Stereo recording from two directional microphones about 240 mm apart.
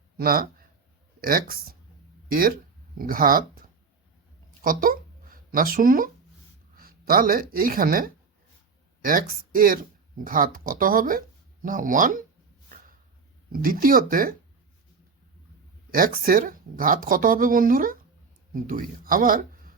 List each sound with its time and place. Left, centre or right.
0.2 s speech: right
3.0 s speech: right
13.5 s speech: right
15.9 s speech: right